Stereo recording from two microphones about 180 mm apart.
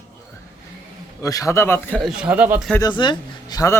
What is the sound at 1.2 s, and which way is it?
Speech, 20° left (ahead or behind).